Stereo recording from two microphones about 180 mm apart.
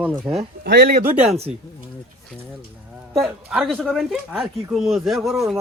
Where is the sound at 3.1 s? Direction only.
5° right (ahead or behind).